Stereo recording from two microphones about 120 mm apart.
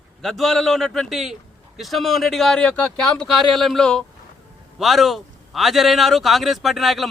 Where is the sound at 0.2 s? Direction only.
Centre (ahead or behind).